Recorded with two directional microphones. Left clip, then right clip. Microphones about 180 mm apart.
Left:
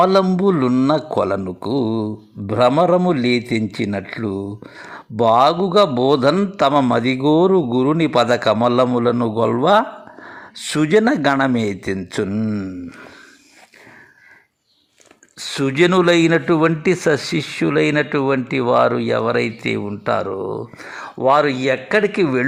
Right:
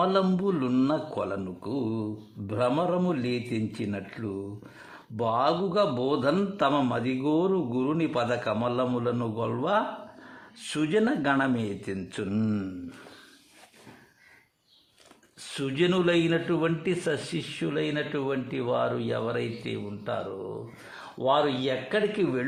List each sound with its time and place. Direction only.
0.0 s a man's voice: 40° left (ahead or behind)
12.4 s speech: 15° left (ahead or behind)
15.5 s a man's voice: 40° left (ahead or behind)